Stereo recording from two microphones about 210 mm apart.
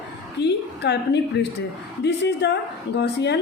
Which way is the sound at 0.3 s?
55° left (ahead or behind).